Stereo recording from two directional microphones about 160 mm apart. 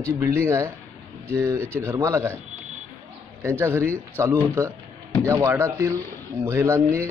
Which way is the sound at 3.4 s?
15° right (ahead or behind).